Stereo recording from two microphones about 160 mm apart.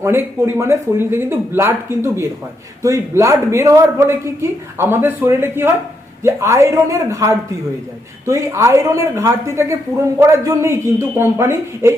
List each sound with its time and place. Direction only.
0.0 s a woman's voice: 15° right (ahead or behind)